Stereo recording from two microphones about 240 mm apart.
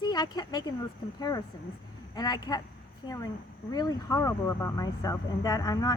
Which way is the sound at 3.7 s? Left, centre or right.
Centre.